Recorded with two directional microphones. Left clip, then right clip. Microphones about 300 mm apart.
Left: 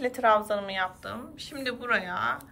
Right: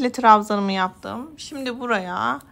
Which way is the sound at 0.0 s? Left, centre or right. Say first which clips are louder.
Right 8 dB; centre.